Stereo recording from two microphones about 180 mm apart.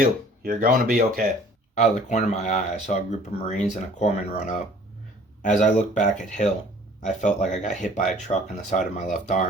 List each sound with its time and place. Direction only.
0.0 s speech: 50° right (ahead or behind)
1.7 s speech: 40° left (ahead or behind)
7.5 s speech: 45° left (ahead or behind)